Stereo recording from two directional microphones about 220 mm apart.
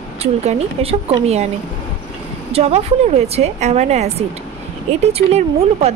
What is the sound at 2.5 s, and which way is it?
Speech, 30° right (ahead or behind).